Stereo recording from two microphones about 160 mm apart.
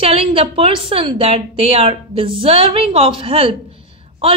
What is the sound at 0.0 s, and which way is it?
A woman's voice, 35° right (ahead or behind).